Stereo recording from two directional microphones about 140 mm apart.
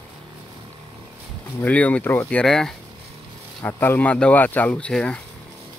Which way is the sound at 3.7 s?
15° left (ahead or behind).